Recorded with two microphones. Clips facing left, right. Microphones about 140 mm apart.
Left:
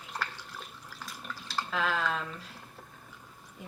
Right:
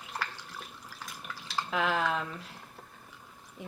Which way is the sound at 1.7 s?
15° right (ahead or behind).